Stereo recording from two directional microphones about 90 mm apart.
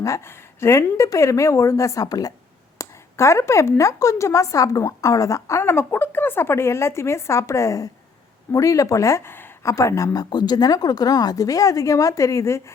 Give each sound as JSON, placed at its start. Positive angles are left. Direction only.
{"t": 0.0, "sound": "speech", "side_deg": 35}
{"t": 2.7, "sound": "speech", "side_deg": 35}
{"t": 9.6, "sound": "speech", "side_deg": 35}